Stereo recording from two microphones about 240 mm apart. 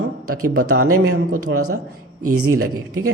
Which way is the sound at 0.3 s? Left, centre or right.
Right.